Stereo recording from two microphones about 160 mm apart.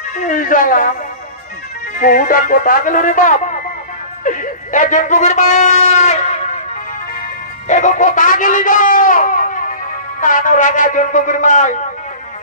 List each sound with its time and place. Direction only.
0.2 s speech: 55° left (ahead or behind)
2.0 s speech: 55° left (ahead or behind)
4.2 s a sound: 55° left (ahead or behind)
7.6 s a man's voice: 50° left (ahead or behind)